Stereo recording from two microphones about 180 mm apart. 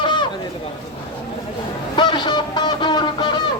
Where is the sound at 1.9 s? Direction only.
25° left (ahead or behind).